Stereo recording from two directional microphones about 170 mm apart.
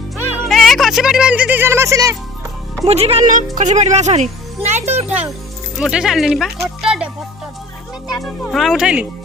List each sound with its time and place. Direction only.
0.4 s speech: centre (ahead or behind); by 2.1 s 20° right (ahead or behind)
2.8 s speech: 35° right (ahead or behind)
4.7 s music: 40° right (ahead or behind)
5.0 s a child's voice: 10° right (ahead or behind)
6.8 s music: 5° right (ahead or behind)
8.2 s speech: centre (ahead or behind)